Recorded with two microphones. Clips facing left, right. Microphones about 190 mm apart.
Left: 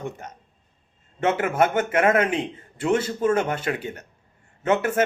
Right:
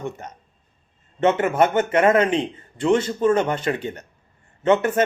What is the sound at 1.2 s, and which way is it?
Speech, 5° left (ahead or behind).